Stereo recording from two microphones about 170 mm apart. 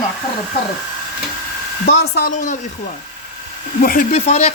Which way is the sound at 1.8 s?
80° left.